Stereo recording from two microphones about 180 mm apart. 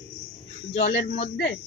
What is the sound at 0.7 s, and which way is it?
Speech, 35° left (ahead or behind).